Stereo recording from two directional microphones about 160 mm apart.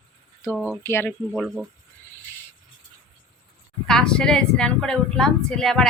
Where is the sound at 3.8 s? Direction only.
5° left (ahead or behind).